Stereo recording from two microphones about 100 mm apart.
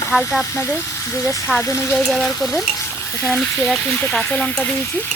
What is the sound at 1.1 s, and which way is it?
Speech, 30° left (ahead or behind).